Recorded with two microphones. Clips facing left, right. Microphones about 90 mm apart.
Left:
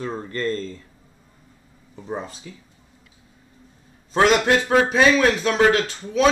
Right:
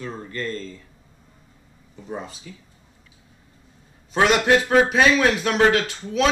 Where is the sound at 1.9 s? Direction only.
35° left (ahead or behind).